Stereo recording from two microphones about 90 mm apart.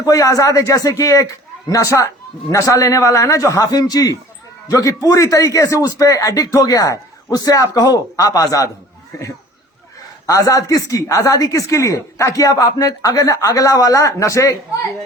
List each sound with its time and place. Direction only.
0.0 s speech: 40° left (ahead or behind)